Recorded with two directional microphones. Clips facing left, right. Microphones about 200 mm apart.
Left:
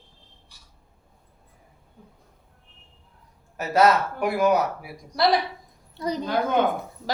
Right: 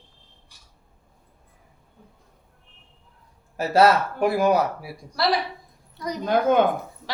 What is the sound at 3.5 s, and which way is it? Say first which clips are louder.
Speech: right 2 dB; 30° right (ahead or behind).